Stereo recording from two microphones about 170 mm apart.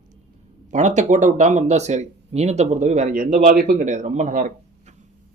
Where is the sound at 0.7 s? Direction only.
45° right (ahead or behind).